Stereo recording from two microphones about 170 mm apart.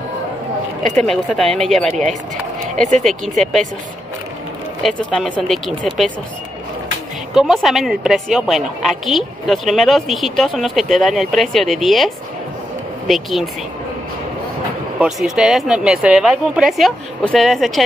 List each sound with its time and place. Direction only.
0.8 s a woman's voice: 5° left (ahead or behind)
1.9 s speech: 45° right (ahead or behind)
3.0 s a woman's voice: centre (ahead or behind)
5.1 s a woman's voice: centre (ahead or behind)
7.3 s a woman's voice: centre (ahead or behind)
15.0 s a woman's voice: centre (ahead or behind)